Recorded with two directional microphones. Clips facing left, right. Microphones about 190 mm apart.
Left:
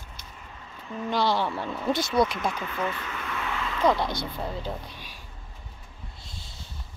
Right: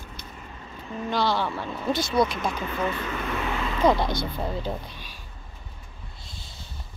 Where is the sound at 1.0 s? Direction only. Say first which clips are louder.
Even; 15° left (ahead or behind).